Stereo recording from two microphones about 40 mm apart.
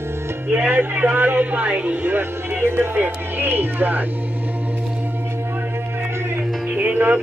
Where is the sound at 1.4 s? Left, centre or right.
Right.